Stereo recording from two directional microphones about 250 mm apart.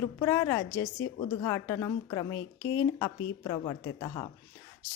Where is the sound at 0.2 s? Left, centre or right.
Centre.